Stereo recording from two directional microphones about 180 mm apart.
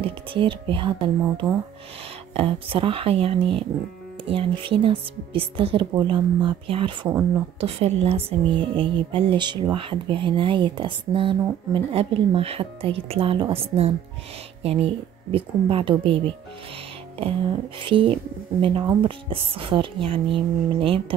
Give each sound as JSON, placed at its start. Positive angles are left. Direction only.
{"t": 0.0, "sound": "speech", "side_deg": -30}
{"t": 17.7, "sound": "speech", "side_deg": -30}